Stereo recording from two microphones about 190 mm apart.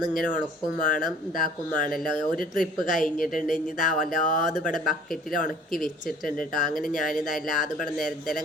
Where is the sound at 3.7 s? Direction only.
45° left (ahead or behind).